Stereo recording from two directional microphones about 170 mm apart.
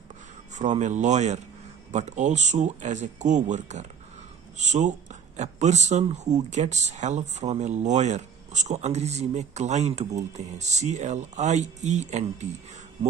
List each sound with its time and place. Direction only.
0.6 s speech: 45° right (ahead or behind)